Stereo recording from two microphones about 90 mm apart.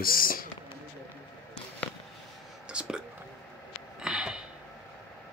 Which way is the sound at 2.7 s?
10° right (ahead or behind).